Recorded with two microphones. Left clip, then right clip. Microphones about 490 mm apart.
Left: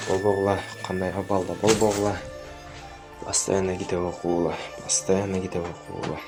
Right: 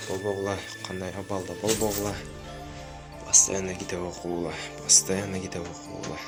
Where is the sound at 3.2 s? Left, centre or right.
Left.